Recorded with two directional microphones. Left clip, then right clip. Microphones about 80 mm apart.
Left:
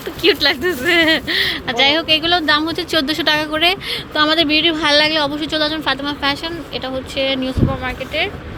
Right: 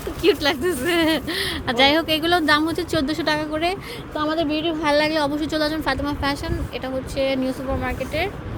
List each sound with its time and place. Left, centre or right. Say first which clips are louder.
0.2 s speech: left 5 dB; centre
1.6 s speech: even; right
2.5 s speech: left 3 dB; right
2.7 s speech: left 5 dB; right
4.1 s speech: left 8 dB; left
5.0 s a woman's voice: left 4 dB; right
5.8 s speech: left 5 dB; right